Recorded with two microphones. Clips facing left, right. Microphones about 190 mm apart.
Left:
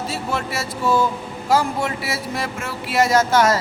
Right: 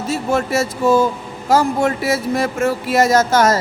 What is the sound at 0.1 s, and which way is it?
Speech, 45° right (ahead or behind).